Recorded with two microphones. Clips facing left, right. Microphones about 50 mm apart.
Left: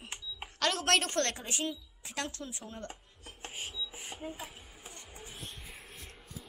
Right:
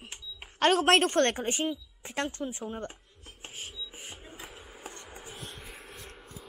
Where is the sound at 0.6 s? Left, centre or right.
Right.